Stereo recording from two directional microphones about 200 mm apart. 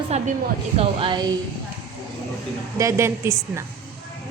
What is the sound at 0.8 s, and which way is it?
Speech, 25° right (ahead or behind).